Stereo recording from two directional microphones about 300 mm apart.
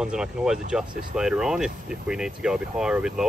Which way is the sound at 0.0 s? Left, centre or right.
Centre.